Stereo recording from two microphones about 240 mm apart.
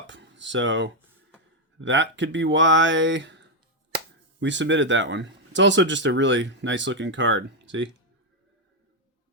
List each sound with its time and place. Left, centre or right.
0.1 s speech: right